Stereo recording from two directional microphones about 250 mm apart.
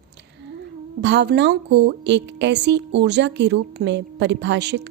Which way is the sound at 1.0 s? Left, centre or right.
Right.